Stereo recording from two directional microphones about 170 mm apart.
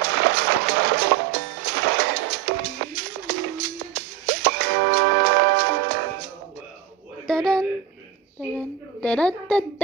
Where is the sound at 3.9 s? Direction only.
70° right (ahead or behind).